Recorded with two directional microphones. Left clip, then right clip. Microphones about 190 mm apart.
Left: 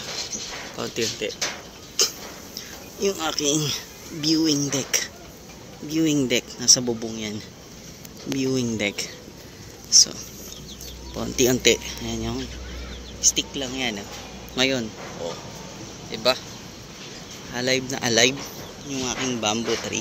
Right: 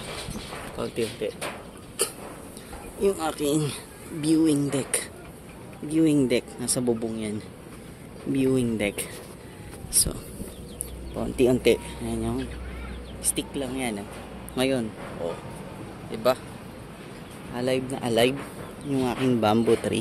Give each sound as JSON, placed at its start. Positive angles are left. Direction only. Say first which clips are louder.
{"t": 0.7, "sound": "speech", "louder": "left 2 dB", "side_deg": 0}
{"t": 3.0, "sound": "speech", "louder": "left 1 dB", "side_deg": -5}
{"t": 8.4, "sound": "speech", "louder": "even", "side_deg": -5}
{"t": 11.1, "sound": "speech", "louder": "left 1 dB", "side_deg": 0}
{"t": 16.1, "sound": "speech", "louder": "left 1 dB", "side_deg": -5}
{"t": 17.6, "sound": "speech", "louder": "left 3 dB", "side_deg": 0}
{"t": 19.0, "sound": "speech", "louder": "right 1 dB", "side_deg": -35}